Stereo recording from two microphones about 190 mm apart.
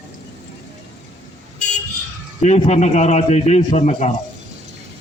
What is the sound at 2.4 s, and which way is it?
A man's voice, 35° left (ahead or behind).